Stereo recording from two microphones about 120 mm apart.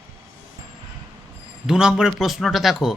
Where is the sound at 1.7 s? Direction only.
5° right (ahead or behind).